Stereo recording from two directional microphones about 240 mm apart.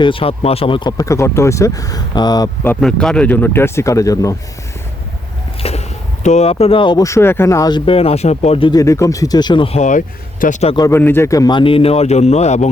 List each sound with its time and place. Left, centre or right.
0.0 s speech: left
2.8 s speech: centre
5.6 s a sound: left
6.2 s speech: left
10.8 s speech: centre; by 12.6 s left